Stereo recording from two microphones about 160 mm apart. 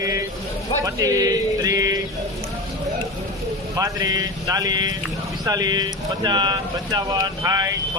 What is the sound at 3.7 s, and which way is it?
Speech, 20° right (ahead or behind).